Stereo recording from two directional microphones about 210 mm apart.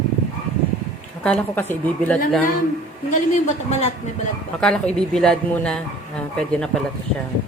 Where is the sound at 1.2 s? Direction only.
5° left (ahead or behind).